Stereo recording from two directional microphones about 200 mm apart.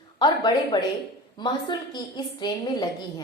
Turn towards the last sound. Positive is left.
turn(degrees=20)  # may be behind; listen again after turning